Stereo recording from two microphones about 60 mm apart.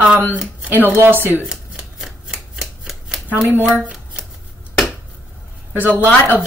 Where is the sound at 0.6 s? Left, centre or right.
Right.